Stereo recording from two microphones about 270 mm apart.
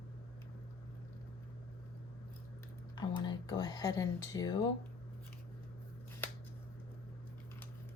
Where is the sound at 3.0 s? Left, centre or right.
Centre.